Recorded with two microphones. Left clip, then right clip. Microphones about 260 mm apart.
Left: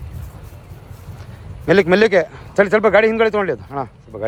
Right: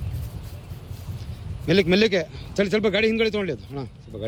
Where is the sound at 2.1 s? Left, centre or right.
Left.